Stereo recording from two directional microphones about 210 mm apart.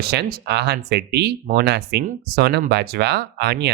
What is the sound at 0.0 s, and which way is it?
Speech, 50° right (ahead or behind).